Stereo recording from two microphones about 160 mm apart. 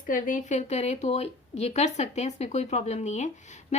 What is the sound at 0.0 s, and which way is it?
A woman's voice, 55° left (ahead or behind).